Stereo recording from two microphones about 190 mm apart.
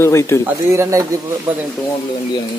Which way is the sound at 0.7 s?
15° right (ahead or behind).